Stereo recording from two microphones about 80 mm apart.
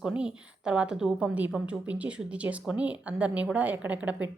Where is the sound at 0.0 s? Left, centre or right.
Centre.